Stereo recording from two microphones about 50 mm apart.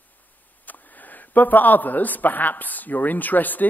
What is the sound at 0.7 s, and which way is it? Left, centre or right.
A man's voice, left.